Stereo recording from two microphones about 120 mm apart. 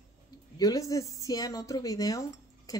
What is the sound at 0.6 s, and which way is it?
A woman's voice, 30° left (ahead or behind).